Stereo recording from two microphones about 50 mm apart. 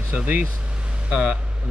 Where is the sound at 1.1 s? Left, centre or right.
Right.